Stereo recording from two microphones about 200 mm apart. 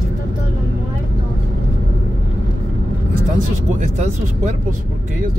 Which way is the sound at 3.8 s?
35° right (ahead or behind).